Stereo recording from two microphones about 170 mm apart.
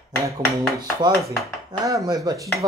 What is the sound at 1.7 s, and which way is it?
Speech, 20° right (ahead or behind).